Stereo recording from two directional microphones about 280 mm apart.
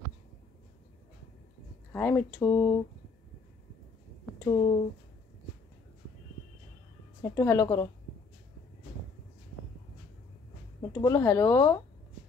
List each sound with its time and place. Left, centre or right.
1.9 s speech: centre
4.5 s speech: centre
7.2 s speech: centre
10.8 s speech: centre